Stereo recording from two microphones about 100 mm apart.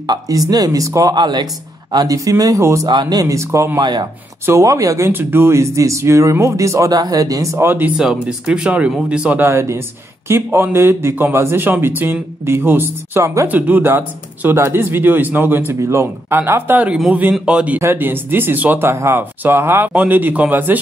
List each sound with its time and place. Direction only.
0.0 s speech: 40° right (ahead or behind)
1.1 s speech: 45° right (ahead or behind); by 2.9 s 30° right (ahead or behind)
2.9 s speech: 45° right (ahead or behind)
3.8 s speech: 45° right (ahead or behind)
4.5 s speech: 30° right (ahead or behind)
7.6 s speech: 20° right (ahead or behind)
8.0 s speech: 5° right (ahead or behind)
9.4 s speech: 30° right (ahead or behind)
13.5 s speech: 15° right (ahead or behind)